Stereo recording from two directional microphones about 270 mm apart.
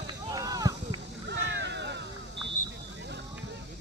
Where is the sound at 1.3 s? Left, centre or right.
Right.